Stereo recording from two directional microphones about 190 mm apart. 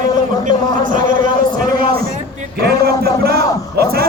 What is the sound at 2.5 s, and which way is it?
Speech, 55° right (ahead or behind).